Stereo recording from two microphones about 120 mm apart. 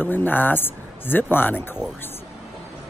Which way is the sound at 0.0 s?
15° left (ahead or behind).